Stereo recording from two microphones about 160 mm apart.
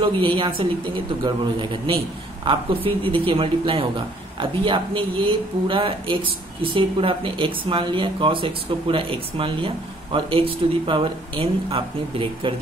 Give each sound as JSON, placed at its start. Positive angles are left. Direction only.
{"t": 0.0, "sound": "speech", "side_deg": -30}